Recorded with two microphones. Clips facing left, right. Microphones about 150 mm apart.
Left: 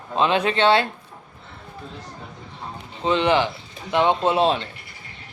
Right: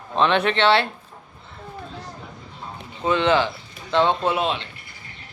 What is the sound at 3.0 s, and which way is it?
A man's voice, 20° left (ahead or behind).